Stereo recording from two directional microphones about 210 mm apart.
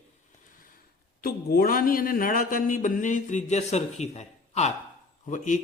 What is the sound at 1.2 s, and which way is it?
A man's voice, 45° left (ahead or behind).